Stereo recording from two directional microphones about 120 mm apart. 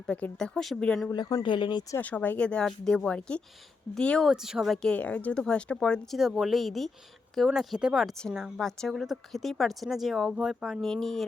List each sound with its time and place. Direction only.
0.1 s a woman's voice: 10° left (ahead or behind)
1.1 s speech: 35° left (ahead or behind)
2.0 s speech: 15° left (ahead or behind)
4.3 s a woman's voice: 5° right (ahead or behind)